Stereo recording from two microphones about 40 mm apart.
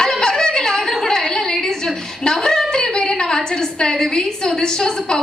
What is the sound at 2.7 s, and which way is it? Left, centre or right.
A woman's voice, centre.